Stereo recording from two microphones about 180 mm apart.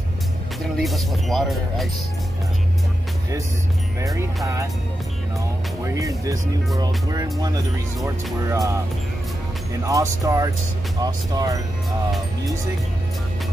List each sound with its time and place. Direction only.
0.6 s speech: centre (ahead or behind)
4.0 s speech: 20° right (ahead or behind)
5.9 s speech: 20° right (ahead or behind)
7.4 s speech: 20° right (ahead or behind)
9.8 s speech: 15° right (ahead or behind)